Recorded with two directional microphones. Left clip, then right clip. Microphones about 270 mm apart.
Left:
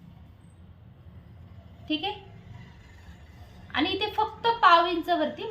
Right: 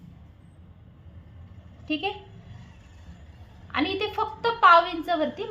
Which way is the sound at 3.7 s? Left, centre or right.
Right.